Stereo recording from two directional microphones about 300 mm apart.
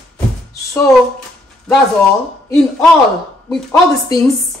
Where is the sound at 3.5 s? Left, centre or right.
Centre.